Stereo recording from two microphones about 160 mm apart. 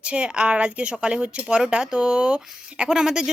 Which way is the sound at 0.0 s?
5° right (ahead or behind).